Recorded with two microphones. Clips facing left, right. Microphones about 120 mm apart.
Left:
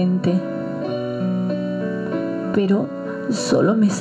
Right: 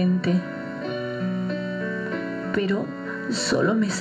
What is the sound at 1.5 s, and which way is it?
Music, 50° left (ahead or behind).